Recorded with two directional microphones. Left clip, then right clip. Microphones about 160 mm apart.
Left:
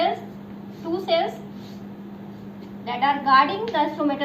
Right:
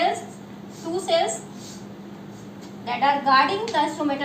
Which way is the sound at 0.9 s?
25° right (ahead or behind).